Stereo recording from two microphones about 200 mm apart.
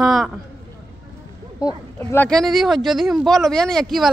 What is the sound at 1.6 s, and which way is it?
Speech, 15° left (ahead or behind).